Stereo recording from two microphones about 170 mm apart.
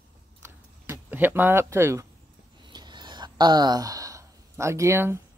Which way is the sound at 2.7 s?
25° right (ahead or behind).